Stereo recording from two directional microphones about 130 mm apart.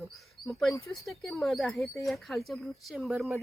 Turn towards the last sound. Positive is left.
turn(degrees=0)  # may be behind; listen again after turning